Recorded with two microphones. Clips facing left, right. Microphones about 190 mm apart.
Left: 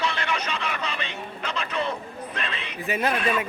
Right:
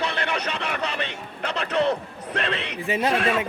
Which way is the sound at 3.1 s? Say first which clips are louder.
Right 3 dB; 90° right.